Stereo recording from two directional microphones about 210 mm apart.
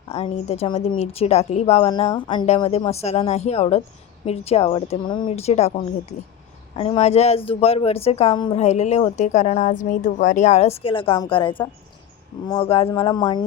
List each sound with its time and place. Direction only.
0.1 s speech: 30° left (ahead or behind)
6.7 s speech: 30° left (ahead or behind)